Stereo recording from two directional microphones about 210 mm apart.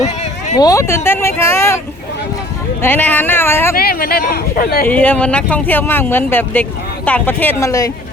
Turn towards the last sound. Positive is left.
turn(degrees=15)  # may be behind; listen again after turning